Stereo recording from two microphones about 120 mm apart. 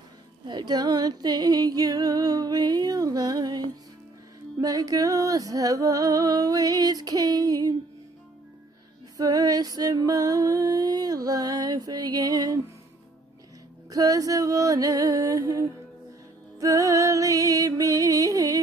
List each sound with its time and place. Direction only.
0.5 s a sound: 35° right (ahead or behind)
9.1 s music: 30° right (ahead or behind)
13.8 s music: 30° right (ahead or behind)